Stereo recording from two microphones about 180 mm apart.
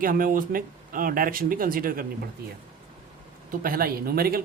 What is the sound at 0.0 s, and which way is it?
Speech, 50° right (ahead or behind).